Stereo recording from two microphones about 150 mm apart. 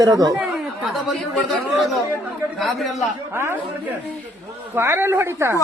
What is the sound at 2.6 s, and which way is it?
Speech, centre (ahead or behind).